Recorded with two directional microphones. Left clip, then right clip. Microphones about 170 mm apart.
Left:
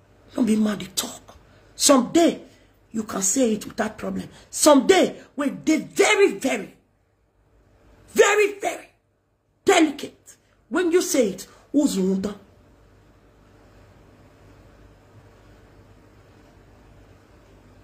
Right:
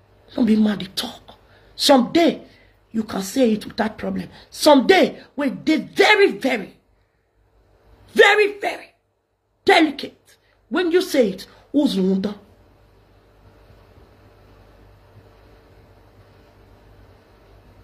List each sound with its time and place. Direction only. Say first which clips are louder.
0.3 s a woman's voice: right 3 dB; 25° left (ahead or behind)
8.1 s a woman's voice: right 4 dB; 20° left (ahead or behind)